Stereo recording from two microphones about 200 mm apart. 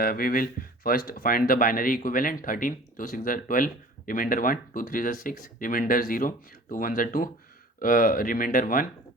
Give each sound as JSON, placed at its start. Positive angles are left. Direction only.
{"t": 0.0, "sound": "speech", "side_deg": 50}